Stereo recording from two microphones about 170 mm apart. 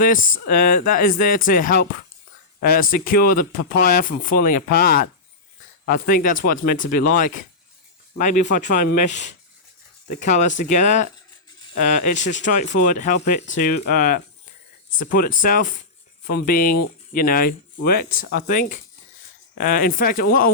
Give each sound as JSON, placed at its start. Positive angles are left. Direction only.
{"t": 0.0, "sound": "speech", "side_deg": 55}
{"t": 13.5, "sound": "speech", "side_deg": 60}